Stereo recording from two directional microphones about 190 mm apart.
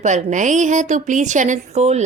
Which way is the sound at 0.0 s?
40° right (ahead or behind).